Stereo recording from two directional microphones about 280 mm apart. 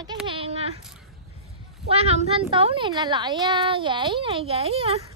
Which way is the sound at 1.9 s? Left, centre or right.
Right.